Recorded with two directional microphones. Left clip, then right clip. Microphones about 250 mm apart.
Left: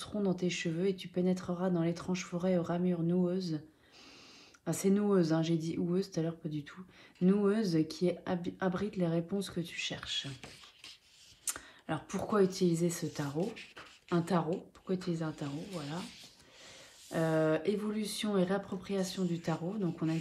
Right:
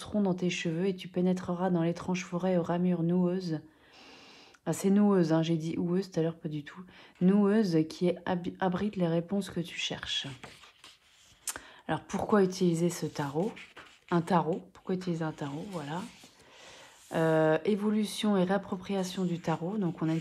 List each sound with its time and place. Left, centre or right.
0.0 s speech: right
4.6 s speech: right
11.4 s speech: right
17.1 s speech: right